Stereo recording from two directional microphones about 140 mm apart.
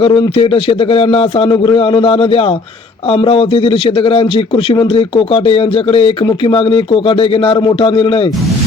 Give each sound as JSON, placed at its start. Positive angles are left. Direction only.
{"t": 0.0, "sound": "a man's voice", "side_deg": 40}